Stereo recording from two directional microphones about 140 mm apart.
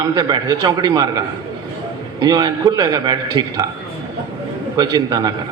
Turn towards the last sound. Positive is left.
turn(degrees=-30)  # may be behind; listen again after turning